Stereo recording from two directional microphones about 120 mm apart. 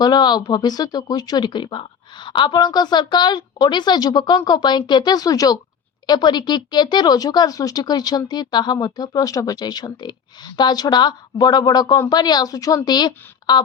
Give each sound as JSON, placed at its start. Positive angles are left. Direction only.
{"t": 0.0, "sound": "speech", "side_deg": 35}